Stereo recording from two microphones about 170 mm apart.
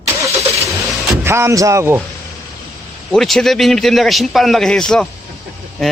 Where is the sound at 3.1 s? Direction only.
Centre (ahead or behind).